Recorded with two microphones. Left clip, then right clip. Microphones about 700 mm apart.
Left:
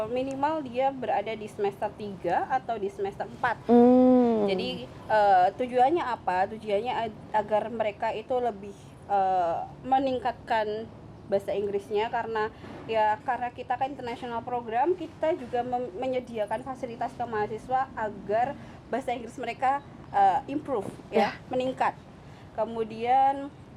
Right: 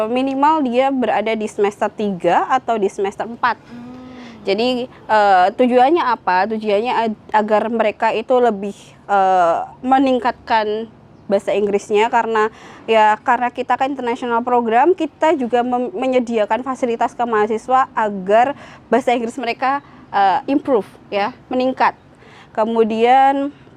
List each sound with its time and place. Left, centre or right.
0.0 s a woman's voice: right
22.5 s a woman's voice: right